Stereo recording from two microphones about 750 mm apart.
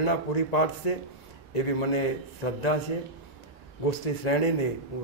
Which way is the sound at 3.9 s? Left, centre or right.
Left.